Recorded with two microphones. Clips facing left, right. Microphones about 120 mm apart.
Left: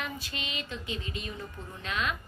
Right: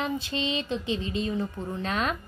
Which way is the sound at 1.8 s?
40° right (ahead or behind).